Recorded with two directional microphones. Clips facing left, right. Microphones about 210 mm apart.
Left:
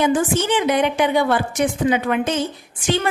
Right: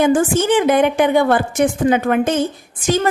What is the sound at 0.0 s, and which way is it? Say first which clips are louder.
A woman's voice: right 4 dB; 50° right (ahead or behind).